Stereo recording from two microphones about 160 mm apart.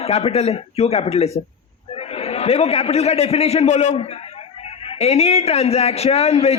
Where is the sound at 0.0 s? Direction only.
40° left (ahead or behind).